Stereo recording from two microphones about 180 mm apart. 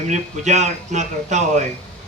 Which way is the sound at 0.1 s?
40° right (ahead or behind).